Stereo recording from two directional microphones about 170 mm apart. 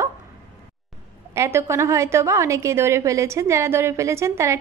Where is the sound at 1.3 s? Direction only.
15° right (ahead or behind).